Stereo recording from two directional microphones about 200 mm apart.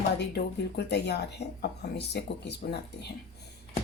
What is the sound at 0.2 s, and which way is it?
Speech, 55° left (ahead or behind).